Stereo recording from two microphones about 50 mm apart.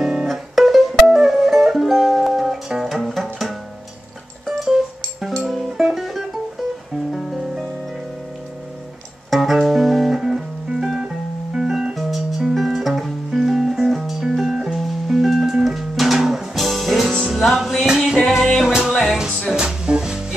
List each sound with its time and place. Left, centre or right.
0.0 s music: centre
0.3 s music: centre
5.4 s music: centre
5.7 s music: centre
5.9 s music: centre
9.3 s music: centre
11.9 s music: centre
19.5 s music: centre